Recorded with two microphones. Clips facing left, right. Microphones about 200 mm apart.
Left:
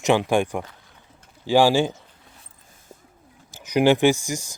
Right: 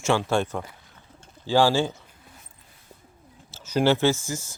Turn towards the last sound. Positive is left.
turn(degrees=15)  # may be behind; listen again after turning